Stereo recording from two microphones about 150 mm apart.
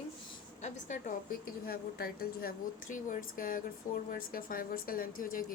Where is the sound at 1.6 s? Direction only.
85° left.